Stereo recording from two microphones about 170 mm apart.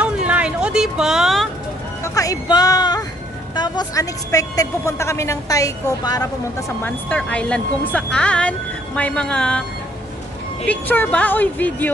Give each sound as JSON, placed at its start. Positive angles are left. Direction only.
{"t": 0.0, "sound": "vehicle", "side_deg": -5}
{"t": 2.1, "sound": "a sound", "side_deg": 20}
{"t": 3.5, "sound": "a woman's voice", "side_deg": 25}
{"t": 6.8, "sound": "speech", "side_deg": 10}